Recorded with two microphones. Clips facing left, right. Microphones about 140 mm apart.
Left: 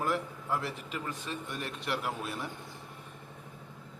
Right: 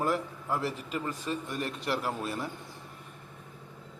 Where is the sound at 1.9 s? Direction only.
5° left (ahead or behind).